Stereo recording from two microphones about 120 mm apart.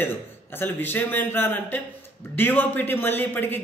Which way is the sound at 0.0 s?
20° left (ahead or behind).